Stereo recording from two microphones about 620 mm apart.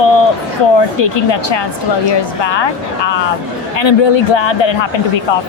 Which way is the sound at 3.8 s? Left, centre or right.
Left.